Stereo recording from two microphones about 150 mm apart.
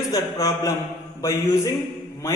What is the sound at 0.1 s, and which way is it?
A man's voice, 20° left (ahead or behind).